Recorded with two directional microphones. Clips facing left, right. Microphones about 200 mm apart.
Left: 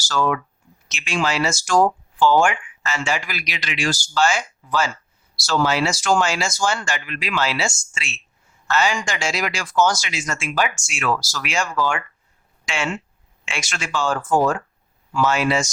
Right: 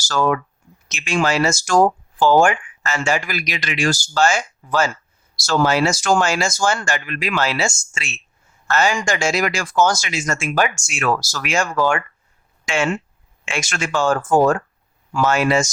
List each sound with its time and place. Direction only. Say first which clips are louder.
0.1 s speech: right 2 dB; 45° right (ahead or behind)